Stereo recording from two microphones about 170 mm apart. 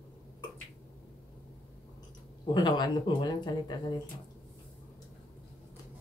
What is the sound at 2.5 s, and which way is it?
Speech, 25° left (ahead or behind).